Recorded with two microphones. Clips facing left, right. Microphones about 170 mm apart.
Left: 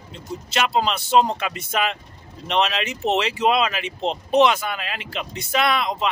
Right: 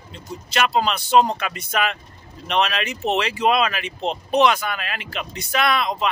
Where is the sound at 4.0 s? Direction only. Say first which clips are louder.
Left 1 dB; 15° right (ahead or behind).